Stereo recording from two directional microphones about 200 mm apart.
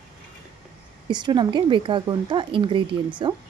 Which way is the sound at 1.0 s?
20° right (ahead or behind).